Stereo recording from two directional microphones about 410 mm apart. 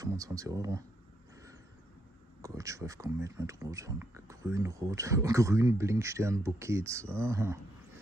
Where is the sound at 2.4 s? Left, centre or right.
Centre.